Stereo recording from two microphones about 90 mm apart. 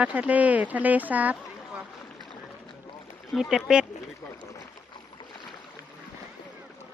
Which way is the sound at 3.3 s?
5° right (ahead or behind).